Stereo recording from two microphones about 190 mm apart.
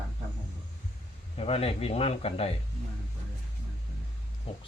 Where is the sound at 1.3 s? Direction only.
30° left (ahead or behind).